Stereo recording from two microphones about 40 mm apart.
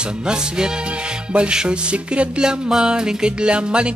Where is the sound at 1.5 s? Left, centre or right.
Right.